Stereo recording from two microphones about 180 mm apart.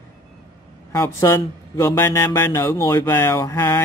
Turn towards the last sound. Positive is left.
turn(degrees=15)  # may be behind; listen again after turning